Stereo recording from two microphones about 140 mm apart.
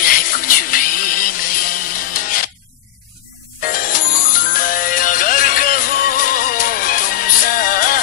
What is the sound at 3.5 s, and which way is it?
Music, 80° left.